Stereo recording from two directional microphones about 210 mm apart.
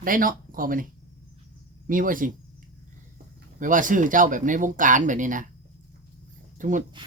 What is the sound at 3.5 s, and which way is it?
Speech, 40° right (ahead or behind).